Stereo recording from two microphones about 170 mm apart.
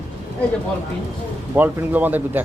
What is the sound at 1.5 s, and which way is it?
Speech, 10° right (ahead or behind).